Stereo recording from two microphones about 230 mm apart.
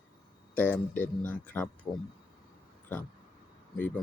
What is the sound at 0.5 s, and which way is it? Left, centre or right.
Speech, centre.